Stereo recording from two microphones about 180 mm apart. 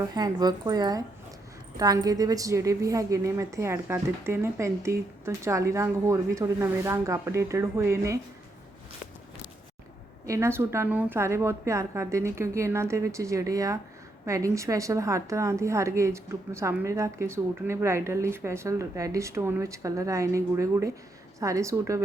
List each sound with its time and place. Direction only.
0.0 s a woman's voice: 20° right (ahead or behind)
10.2 s a woman's voice: 15° right (ahead or behind)